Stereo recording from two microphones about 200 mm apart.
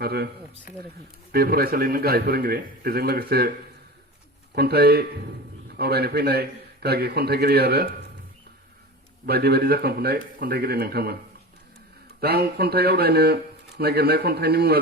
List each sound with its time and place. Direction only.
0.0 s speech: 50° right (ahead or behind)
1.3 s speech: 50° right (ahead or behind)
4.5 s speech: 50° right (ahead or behind)
9.2 s speech: 55° right (ahead or behind)
12.2 s speech: 50° right (ahead or behind)